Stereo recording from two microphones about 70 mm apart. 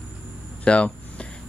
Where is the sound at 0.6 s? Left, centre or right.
Centre.